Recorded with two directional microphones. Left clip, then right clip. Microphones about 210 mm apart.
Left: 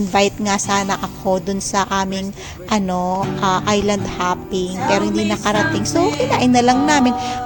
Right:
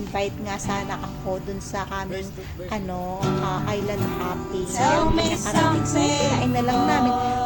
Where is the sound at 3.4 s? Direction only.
45° left (ahead or behind).